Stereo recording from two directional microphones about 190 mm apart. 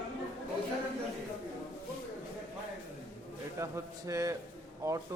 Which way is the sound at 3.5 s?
15° right (ahead or behind).